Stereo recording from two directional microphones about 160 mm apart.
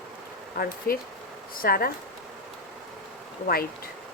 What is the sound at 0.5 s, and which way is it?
Speech, 65° left (ahead or behind).